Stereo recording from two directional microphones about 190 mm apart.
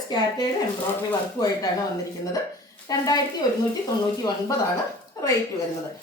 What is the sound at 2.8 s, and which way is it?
Speech, 20° left (ahead or behind).